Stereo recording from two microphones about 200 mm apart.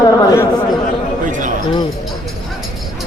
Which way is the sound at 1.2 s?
40° right (ahead or behind).